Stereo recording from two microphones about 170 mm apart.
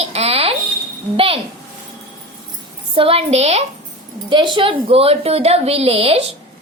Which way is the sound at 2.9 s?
35° right (ahead or behind).